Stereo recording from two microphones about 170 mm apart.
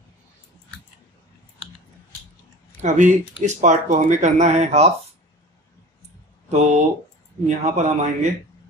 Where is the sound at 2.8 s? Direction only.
45° right (ahead or behind).